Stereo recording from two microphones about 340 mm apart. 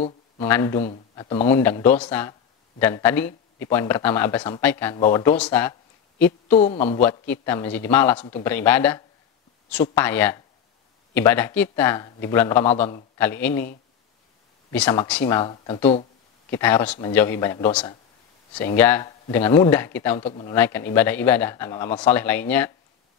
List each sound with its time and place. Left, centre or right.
0.4 s speech: centre
14.7 s speech: centre
20.5 s speech: centre